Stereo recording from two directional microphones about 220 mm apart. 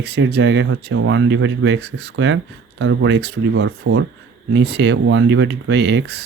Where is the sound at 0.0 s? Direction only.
50° right (ahead or behind).